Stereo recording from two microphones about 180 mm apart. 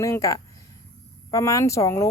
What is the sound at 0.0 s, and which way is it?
A woman's voice, 15° left (ahead or behind).